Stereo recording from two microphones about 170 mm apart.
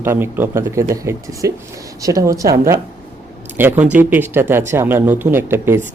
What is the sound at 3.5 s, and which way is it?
A man's voice, 10° right (ahead or behind).